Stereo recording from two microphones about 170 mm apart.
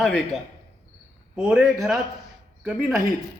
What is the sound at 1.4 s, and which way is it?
Speech, 5° right (ahead or behind).